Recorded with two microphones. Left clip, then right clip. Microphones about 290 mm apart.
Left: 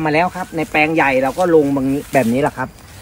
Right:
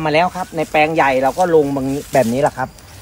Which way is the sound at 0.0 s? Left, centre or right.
Centre.